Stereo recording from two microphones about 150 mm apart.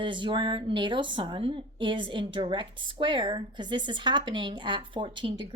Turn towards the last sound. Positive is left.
turn(degrees=-35)  # may be behind; listen again after turning